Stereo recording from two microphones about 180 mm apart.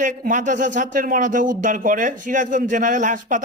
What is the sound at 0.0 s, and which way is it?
Speech, 45° right (ahead or behind).